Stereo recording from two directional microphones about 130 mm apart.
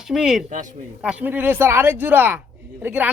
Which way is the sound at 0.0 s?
5° right (ahead or behind).